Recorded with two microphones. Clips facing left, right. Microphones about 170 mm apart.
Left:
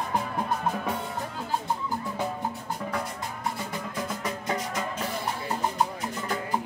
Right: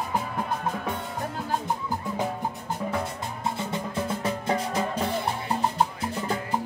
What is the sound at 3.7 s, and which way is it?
Music, 30° right (ahead or behind).